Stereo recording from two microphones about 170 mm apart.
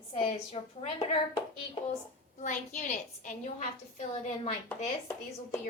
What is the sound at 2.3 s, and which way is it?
A woman's voice, 50° left (ahead or behind).